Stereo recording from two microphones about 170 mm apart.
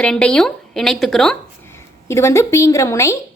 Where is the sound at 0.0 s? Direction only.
5° left (ahead or behind).